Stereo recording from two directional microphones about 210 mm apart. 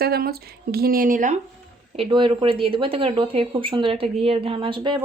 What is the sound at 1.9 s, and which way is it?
Speech, 25° right (ahead or behind).